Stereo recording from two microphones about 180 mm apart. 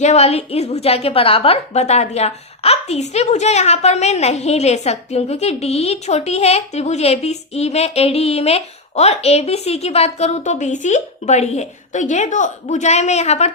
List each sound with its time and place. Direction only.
0.0 s a woman's voice: 40° left (ahead or behind)